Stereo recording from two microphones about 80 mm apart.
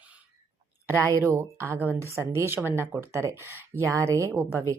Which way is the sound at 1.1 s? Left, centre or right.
Right.